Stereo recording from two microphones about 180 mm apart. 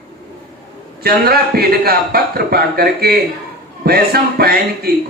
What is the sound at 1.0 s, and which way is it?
Speech, 60° right (ahead or behind).